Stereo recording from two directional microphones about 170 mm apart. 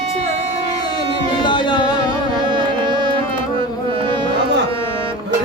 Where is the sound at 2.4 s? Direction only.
30° right (ahead or behind).